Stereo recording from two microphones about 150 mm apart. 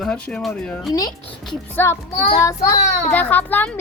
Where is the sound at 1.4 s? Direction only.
15° left (ahead or behind).